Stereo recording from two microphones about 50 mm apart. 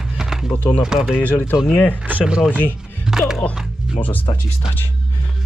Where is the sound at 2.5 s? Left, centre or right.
Right.